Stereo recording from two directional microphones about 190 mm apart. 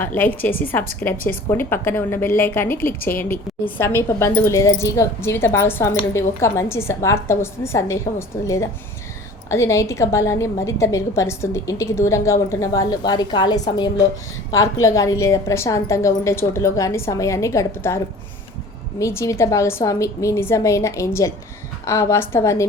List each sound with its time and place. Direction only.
0.0 s a woman's voice: 10° left (ahead or behind)